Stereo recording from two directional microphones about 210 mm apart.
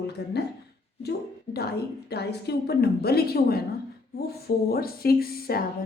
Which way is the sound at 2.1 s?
50° left (ahead or behind).